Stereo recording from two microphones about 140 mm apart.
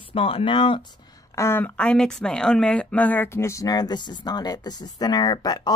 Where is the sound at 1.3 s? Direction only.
15° left (ahead or behind).